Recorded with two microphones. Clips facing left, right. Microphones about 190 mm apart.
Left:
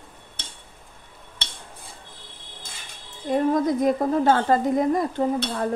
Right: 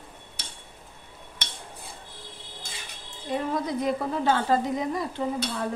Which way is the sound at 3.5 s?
45° left (ahead or behind).